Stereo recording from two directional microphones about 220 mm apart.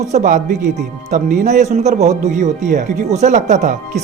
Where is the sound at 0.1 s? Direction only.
35° right (ahead or behind).